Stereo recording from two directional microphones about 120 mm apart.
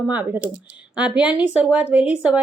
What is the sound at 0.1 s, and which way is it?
Speech, 10° right (ahead or behind).